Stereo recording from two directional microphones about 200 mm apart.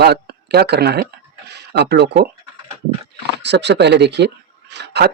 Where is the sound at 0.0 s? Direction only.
55° right (ahead or behind).